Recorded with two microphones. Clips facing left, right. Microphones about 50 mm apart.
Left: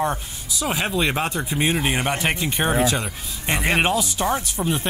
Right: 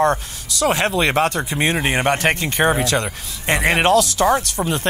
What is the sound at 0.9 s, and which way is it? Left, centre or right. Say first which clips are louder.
Speech: right 5 dB; right.